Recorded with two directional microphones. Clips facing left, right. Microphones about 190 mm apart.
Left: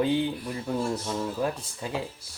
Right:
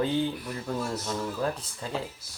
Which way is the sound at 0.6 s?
15° left (ahead or behind).